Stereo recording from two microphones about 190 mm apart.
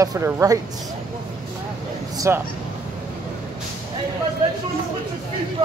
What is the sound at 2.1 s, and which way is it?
Speech, 15° right (ahead or behind).